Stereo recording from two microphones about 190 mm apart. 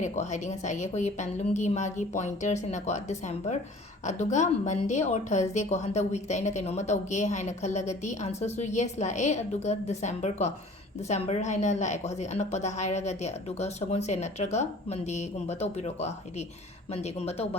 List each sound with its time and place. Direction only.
0.0 s a woman's voice: 40° left (ahead or behind)